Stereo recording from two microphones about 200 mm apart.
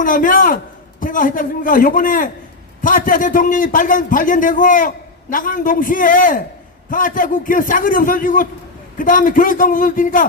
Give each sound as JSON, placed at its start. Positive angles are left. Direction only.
{"t": 0.0, "sound": "a man's voice", "side_deg": 40}